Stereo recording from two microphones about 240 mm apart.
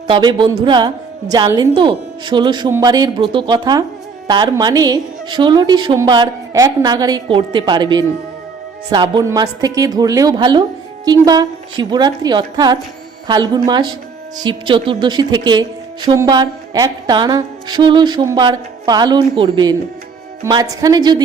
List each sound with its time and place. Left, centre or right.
0.1 s a woman's voice: centre